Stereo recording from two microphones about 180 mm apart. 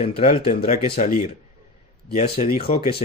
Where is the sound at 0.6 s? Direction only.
45° left (ahead or behind).